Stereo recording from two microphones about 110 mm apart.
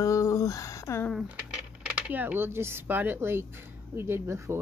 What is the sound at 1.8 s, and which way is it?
Speech, 15° right (ahead or behind).